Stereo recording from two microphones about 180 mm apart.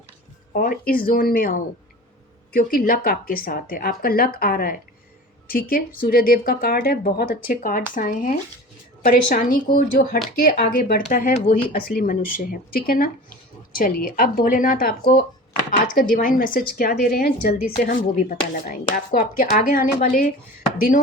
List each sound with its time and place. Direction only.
0.5 s speech: 55° left (ahead or behind)